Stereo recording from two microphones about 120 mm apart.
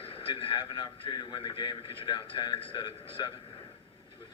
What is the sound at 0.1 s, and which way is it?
A man's voice, 50° left (ahead or behind).